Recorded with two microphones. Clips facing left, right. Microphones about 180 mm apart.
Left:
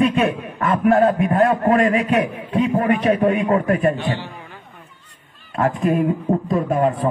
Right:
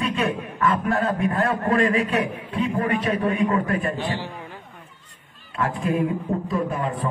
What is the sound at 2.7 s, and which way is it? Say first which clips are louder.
A man's voice: left 6 dB; 40° left (ahead or behind).